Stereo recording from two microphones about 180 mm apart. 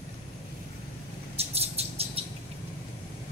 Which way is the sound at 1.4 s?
35° right (ahead or behind).